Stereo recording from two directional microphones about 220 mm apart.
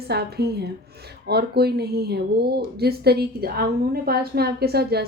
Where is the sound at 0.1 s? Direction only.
45° right (ahead or behind).